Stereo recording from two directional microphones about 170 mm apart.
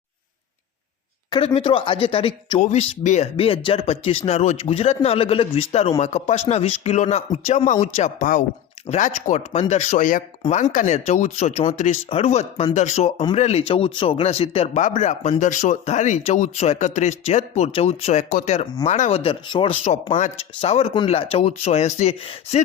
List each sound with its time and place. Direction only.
1.5 s speech: 30° left (ahead or behind)
2.6 s speech: 45° left (ahead or behind)